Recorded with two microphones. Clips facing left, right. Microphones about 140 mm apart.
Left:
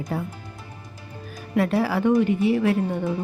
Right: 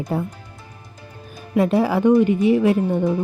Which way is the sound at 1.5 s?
20° right (ahead or behind).